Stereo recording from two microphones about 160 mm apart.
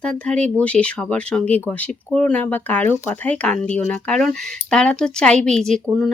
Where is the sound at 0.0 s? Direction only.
5° left (ahead or behind).